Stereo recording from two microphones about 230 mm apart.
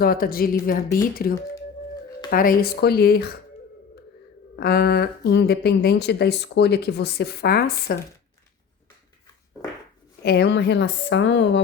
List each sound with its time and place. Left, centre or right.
0.0 s speech: left
4.5 s speech: left
10.2 s speech: left